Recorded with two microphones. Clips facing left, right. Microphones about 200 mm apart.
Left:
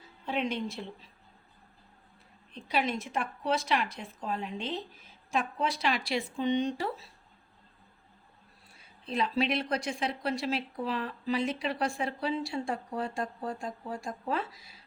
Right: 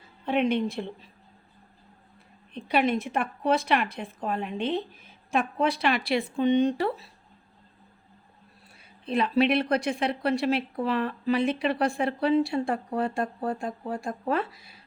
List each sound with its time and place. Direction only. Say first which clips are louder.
0.3 s a woman's voice: right 7 dB; 60° right (ahead or behind)
2.5 s a woman's voice: right 6 dB; 60° right (ahead or behind)
9.0 s a woman's voice: right 6 dB; 60° right (ahead or behind)